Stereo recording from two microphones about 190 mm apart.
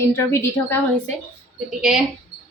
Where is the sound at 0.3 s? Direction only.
10° left (ahead or behind).